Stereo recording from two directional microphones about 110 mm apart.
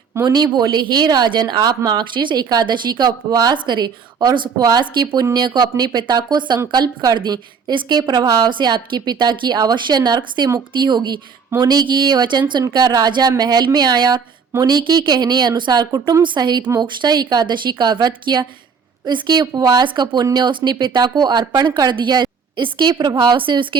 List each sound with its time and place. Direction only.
0.3 s a woman's voice: 40° right (ahead or behind)